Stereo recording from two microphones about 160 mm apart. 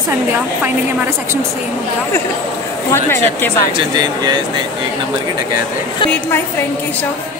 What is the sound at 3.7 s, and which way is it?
Speech, 25° right (ahead or behind).